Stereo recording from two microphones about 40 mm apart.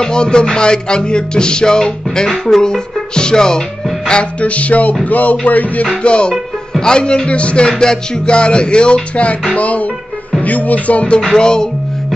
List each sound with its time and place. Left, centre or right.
0.0 s music: left
2.4 s speech: centre
4.0 s music: centre
4.4 s speech: left
6.0 s music: left
9.6 s speech: left
11.3 s music: centre